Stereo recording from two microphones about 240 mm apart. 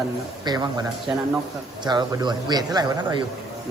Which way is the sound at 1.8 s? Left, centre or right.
Centre.